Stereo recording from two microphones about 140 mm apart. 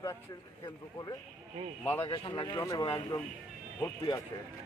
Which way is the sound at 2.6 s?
25° left (ahead or behind).